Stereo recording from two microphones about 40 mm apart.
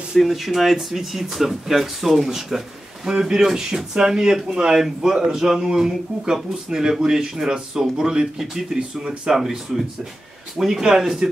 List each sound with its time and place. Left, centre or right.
0.2 s speech: centre
10.6 s speech: centre